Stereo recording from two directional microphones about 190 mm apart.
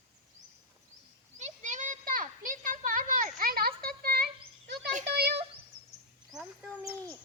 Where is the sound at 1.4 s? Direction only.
40° right (ahead or behind); by 5.3 s 60° right (ahead or behind).